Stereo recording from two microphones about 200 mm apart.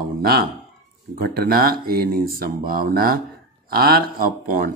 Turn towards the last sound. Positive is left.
turn(degrees=-45)  # may be behind; listen again after turning